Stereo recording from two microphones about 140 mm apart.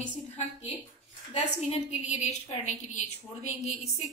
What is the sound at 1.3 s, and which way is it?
A woman's voice, 55° left (ahead or behind).